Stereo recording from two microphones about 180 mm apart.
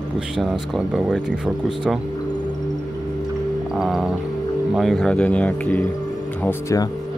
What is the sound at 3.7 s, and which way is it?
Speech, centre (ahead or behind).